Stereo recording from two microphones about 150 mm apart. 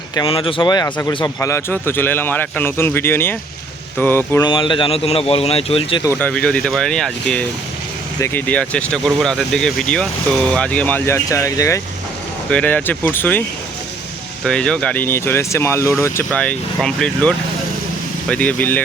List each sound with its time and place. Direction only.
0.3 s a man's voice: 35° left (ahead or behind)
1.0 s speech: 20° left (ahead or behind)
4.4 s a man's voice: 35° left (ahead or behind)
6.1 s speech: 10° left (ahead or behind)
12.5 s speech: 10° left (ahead or behind)
14.4 s speech: 5° left (ahead or behind)